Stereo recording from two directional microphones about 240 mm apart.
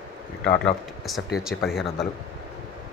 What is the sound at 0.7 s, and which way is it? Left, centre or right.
Speech, centre.